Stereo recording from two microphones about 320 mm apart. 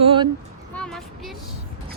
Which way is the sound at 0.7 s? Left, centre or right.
Centre.